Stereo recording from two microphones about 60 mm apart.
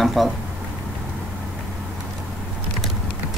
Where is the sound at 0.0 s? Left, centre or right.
Centre.